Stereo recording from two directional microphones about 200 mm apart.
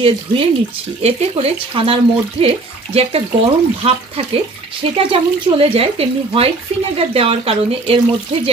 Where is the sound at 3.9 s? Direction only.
30° right (ahead or behind).